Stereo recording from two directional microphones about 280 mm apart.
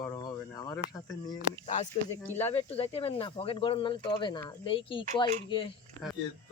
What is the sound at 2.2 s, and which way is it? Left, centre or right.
Speech, centre.